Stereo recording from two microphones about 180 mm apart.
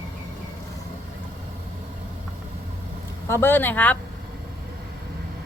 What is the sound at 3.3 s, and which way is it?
Speech, 10° left (ahead or behind).